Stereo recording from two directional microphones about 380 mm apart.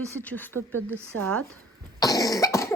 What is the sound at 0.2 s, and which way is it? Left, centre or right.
Speech, centre.